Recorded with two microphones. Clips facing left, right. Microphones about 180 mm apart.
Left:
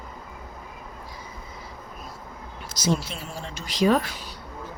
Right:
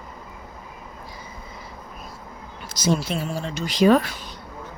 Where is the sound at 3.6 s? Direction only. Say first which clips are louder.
Right 4 dB; 70° right (ahead or behind).